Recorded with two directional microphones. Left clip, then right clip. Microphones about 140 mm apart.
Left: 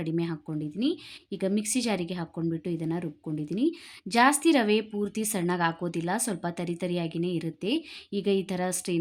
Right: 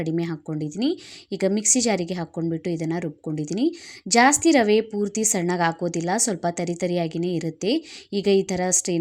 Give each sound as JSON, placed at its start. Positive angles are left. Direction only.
{"t": 0.0, "sound": "speech", "side_deg": -30}